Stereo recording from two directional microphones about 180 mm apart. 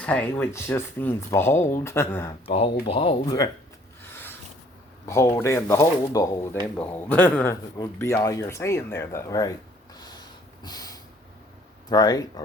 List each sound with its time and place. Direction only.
0.0 s speech: 5° left (ahead or behind)
2.9 s speech: 30° left (ahead or behind)
5.0 s speech: 15° left (ahead or behind)
10.6 s snort: 20° left (ahead or behind)
11.9 s speech: 20° left (ahead or behind)